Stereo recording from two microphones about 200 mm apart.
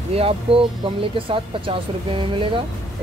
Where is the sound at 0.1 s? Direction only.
30° right (ahead or behind).